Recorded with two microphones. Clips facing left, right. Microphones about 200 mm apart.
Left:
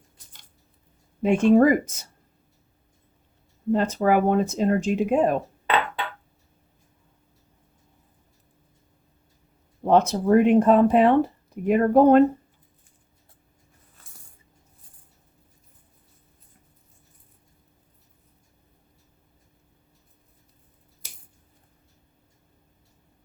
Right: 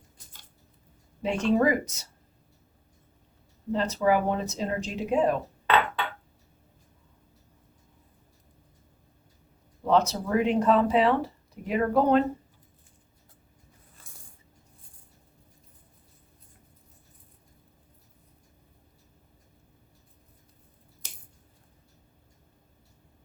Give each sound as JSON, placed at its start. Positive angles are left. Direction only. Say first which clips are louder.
{"t": 1.2, "sound": "speech", "louder": "left 7 dB", "side_deg": 50}
{"t": 3.7, "sound": "speech", "louder": "left 4 dB", "side_deg": 50}
{"t": 9.8, "sound": "speech", "louder": "left 5 dB", "side_deg": 55}